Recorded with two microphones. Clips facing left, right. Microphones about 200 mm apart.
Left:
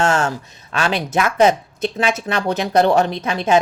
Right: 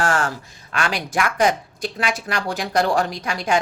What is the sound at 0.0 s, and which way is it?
Speech, 25° left (ahead or behind).